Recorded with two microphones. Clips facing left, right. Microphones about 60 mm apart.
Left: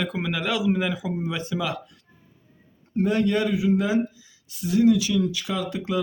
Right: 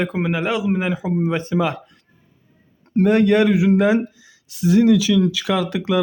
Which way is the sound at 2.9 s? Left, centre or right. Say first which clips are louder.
Right 7 dB; right.